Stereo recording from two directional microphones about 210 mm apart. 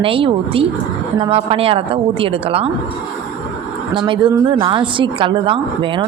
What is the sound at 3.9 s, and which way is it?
A woman's voice, 25° right (ahead or behind).